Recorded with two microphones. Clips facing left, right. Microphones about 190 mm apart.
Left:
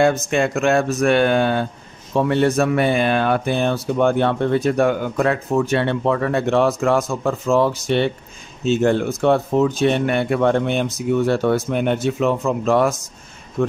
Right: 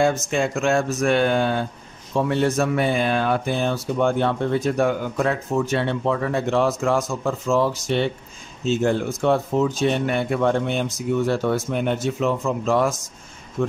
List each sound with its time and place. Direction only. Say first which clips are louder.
0.0 s speech: left 3 dB; 65° left (ahead or behind)